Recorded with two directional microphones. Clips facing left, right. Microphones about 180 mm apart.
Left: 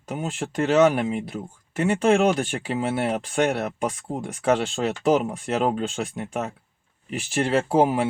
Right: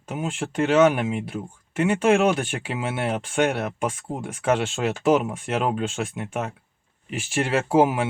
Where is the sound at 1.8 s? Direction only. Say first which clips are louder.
Even; centre (ahead or behind).